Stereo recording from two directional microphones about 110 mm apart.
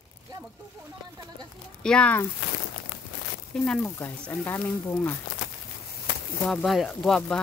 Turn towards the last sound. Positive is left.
turn(degrees=5)  # may be behind; listen again after turning